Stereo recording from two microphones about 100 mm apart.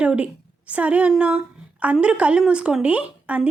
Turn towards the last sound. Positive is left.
turn(degrees=-15)  # may be behind; listen again after turning